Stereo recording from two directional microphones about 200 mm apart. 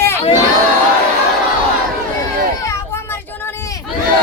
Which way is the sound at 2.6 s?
10° left (ahead or behind).